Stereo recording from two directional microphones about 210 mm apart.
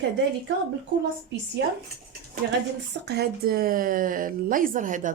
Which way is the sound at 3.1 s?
50° right (ahead or behind).